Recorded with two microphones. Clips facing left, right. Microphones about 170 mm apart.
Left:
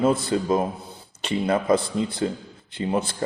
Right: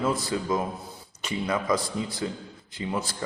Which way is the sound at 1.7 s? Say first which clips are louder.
Left 6 dB; 55° left (ahead or behind).